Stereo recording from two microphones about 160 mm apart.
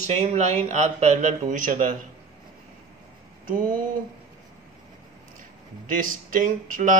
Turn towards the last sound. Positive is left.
turn(degrees=-55)  # may be behind; listen again after turning